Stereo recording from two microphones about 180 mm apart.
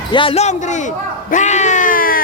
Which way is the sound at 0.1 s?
30° left (ahead or behind).